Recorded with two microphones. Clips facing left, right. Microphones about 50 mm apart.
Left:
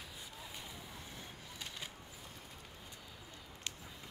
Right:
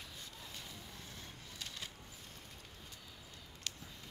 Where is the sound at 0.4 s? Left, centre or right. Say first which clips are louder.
Left 3 dB; centre.